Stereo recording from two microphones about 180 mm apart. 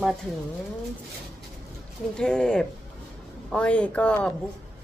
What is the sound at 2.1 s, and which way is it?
A woman's voice, 5° left (ahead or behind).